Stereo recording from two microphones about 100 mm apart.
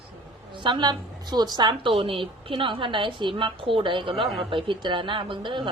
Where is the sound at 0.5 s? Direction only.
50° right (ahead or behind).